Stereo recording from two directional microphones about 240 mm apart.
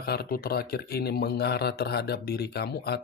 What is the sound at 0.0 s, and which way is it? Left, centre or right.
Speech, left.